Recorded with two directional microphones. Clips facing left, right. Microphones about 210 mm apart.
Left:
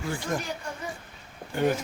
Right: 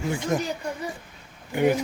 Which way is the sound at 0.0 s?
20° right (ahead or behind).